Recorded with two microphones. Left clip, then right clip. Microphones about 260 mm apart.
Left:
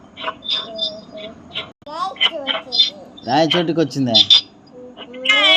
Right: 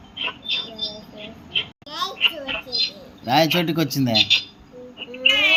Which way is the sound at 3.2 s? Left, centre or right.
Right.